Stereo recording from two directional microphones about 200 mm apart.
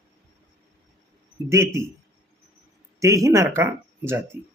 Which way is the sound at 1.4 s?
15° right (ahead or behind).